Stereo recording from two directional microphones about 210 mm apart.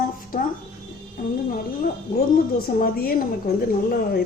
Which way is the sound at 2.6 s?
45° left (ahead or behind).